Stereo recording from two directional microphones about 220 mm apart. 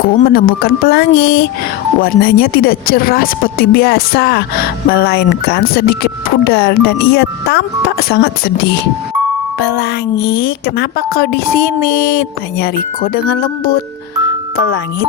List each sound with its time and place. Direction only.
0.0 s a woman's voice: 40° left (ahead or behind)